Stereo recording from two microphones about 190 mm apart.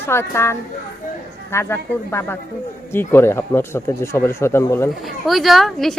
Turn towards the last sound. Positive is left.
turn(degrees=0)  # may be behind; listen again after turning